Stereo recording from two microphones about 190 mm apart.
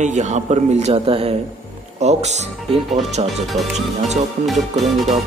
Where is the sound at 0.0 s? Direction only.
40° right (ahead or behind).